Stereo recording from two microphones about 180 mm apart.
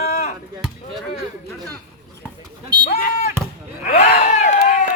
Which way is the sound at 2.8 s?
45° left (ahead or behind).